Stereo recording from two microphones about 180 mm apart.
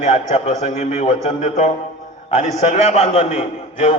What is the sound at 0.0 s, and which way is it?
A man's voice, 40° left (ahead or behind).